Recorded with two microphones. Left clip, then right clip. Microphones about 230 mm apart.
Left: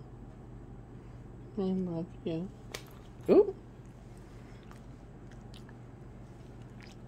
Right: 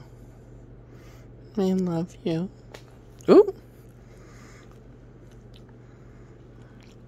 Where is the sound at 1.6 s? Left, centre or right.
Right.